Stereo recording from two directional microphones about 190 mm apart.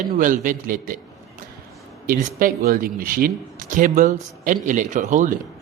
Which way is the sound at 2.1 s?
45° right (ahead or behind).